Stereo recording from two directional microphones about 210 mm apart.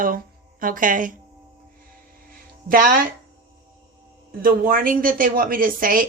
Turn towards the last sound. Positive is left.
turn(degrees=-40)  # may be behind; listen again after turning